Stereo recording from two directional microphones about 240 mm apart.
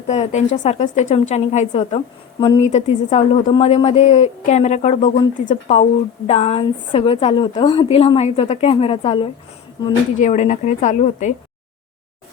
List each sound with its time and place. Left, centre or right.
0.1 s a woman's voice: left